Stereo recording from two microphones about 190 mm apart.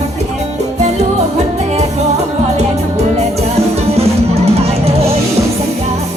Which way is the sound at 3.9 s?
35° right (ahead or behind).